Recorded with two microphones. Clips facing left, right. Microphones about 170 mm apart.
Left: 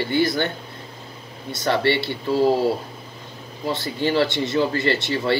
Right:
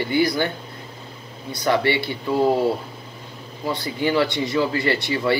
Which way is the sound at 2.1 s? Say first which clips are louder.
Even; 20° right (ahead or behind).